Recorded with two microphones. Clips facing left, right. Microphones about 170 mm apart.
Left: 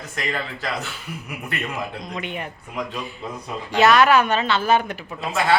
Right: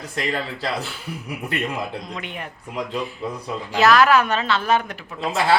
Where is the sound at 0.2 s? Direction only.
30° right (ahead or behind).